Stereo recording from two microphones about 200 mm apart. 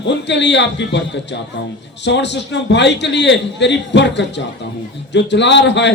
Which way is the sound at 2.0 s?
60° left (ahead or behind).